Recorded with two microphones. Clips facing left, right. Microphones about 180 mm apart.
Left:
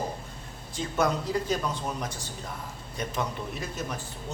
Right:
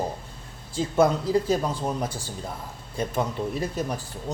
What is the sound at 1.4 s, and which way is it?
A man's voice, 30° right (ahead or behind).